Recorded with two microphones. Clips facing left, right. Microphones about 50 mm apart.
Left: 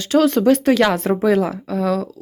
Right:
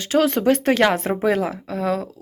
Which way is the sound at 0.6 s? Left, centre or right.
Right.